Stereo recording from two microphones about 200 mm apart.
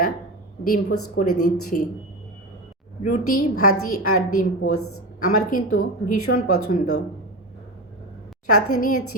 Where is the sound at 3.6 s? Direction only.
90° left.